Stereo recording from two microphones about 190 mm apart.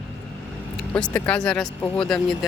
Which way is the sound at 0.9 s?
5° left (ahead or behind).